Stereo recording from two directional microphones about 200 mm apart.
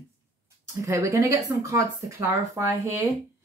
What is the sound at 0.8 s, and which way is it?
A woman's voice, 15° right (ahead or behind).